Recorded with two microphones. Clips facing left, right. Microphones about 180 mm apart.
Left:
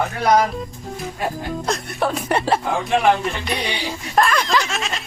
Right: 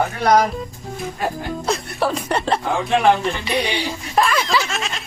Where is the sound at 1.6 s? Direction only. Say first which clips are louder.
Right 1 dB; centre (ahead or behind).